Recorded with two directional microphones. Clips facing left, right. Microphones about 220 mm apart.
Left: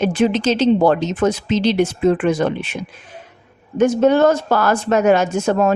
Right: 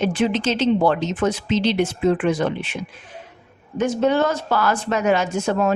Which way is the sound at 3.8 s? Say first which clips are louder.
Left 6 dB; 50° left (ahead or behind).